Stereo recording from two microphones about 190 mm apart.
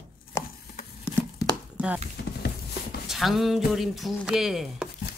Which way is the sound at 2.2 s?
60° left (ahead or behind).